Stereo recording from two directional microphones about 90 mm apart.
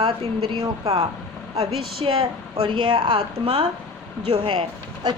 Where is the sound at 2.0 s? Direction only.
90° right; by 3.5 s 65° right (ahead or behind).